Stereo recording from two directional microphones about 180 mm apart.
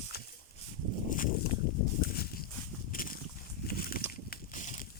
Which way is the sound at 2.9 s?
50° left (ahead or behind).